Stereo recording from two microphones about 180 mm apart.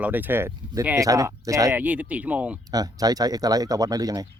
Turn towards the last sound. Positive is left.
turn(degrees=-20)  # may be behind; listen again after turning